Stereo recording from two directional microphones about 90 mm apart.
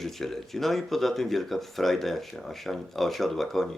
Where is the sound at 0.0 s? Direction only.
5° left (ahead or behind).